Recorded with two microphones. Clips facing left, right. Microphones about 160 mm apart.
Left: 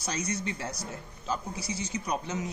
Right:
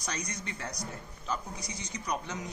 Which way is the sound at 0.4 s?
5° left (ahead or behind).